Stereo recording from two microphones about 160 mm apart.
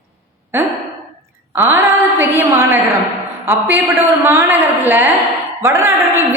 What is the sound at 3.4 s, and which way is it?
A man's voice, 15° right (ahead or behind).